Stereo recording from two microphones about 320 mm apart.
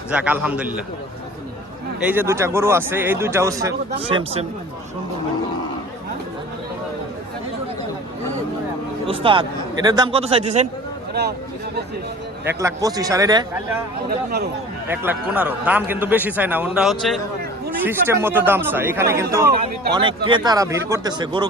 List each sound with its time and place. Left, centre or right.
0.1 s a man's voice: centre
2.0 s speech: centre
9.0 s speech: centre
12.5 s speech: centre
14.8 s a man's voice: centre